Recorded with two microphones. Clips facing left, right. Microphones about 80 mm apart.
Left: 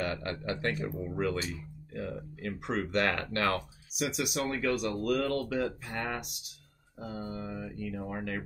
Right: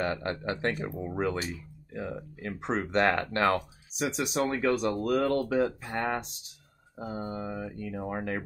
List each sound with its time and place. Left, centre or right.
0.0 s speech: right